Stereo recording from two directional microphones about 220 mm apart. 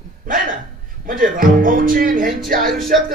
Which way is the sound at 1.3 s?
40° right (ahead or behind).